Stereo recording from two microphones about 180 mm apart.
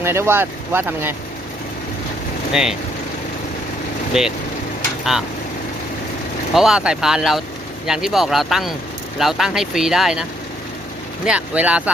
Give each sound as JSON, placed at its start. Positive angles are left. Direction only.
{"t": 0.0, "sound": "speech", "side_deg": -15}
{"t": 2.5, "sound": "speech", "side_deg": -5}
{"t": 4.1, "sound": "speech", "side_deg": -5}
{"t": 6.5, "sound": "speech", "side_deg": 0}
{"t": 11.3, "sound": "speech", "side_deg": -5}